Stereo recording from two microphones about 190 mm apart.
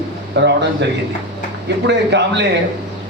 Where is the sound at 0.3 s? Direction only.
65° right (ahead or behind).